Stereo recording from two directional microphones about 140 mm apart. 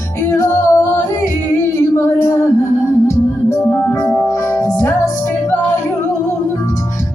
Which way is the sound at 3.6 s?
15° left (ahead or behind).